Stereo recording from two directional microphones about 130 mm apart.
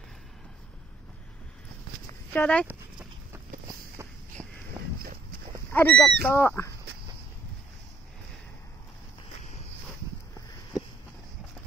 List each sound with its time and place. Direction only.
2.3 s speech: 10° left (ahead or behind)
2.6 s dog: 10° right (ahead or behind)
4.4 s a sound: 5° left (ahead or behind)
5.7 s speech: 15° left (ahead or behind)